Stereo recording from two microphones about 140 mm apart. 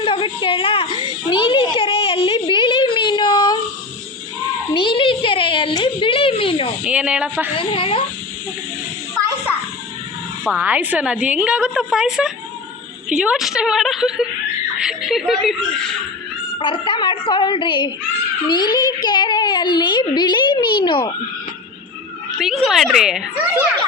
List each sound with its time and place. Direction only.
0.0 s a sound: 35° left (ahead or behind)
4.7 s a sound: 40° left (ahead or behind)
6.8 s speech: 10° right (ahead or behind)
7.6 s a woman's voice: 40° left (ahead or behind)
10.6 s a woman's voice: 10° right (ahead or behind)
16.6 s a woman's voice: 35° left (ahead or behind)
22.4 s a child's voice: centre (ahead or behind)